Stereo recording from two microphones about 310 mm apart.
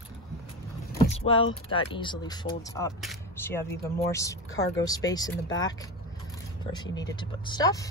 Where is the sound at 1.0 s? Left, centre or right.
Centre.